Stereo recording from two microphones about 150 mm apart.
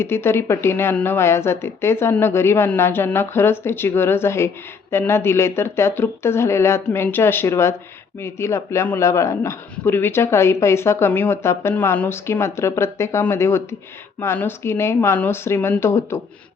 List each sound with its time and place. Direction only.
0.0 s speech: 15° left (ahead or behind)